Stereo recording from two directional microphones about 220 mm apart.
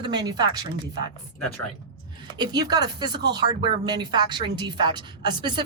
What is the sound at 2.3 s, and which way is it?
Speech, 20° right (ahead or behind).